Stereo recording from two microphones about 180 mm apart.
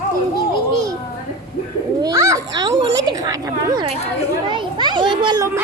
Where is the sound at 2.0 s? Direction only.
15° right (ahead or behind).